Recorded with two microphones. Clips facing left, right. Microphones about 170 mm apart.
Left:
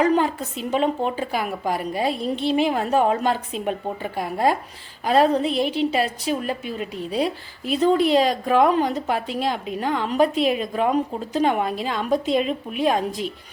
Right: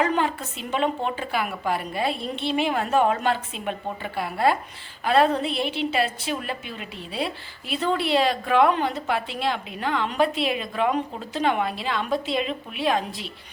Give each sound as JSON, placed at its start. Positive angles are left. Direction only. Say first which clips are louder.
{"t": 0.0, "sound": "a woman's voice", "louder": "left 4 dB", "side_deg": 40}